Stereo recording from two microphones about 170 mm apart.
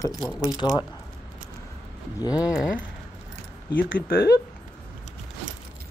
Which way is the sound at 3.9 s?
65° left (ahead or behind).